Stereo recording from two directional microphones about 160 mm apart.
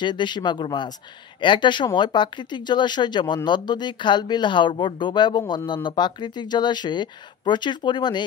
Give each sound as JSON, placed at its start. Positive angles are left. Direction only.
{"t": 0.0, "sound": "speech", "side_deg": 30}